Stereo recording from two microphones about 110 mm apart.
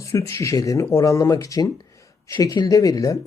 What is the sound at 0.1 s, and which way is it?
Speech, 25° left (ahead or behind).